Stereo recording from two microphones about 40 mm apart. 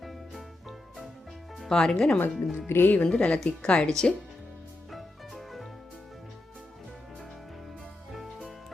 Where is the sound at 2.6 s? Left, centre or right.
Left.